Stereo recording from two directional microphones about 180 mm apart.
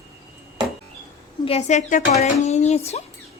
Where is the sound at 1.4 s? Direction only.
35° left (ahead or behind).